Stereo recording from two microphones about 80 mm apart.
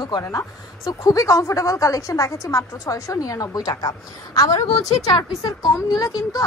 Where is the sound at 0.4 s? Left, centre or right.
Left.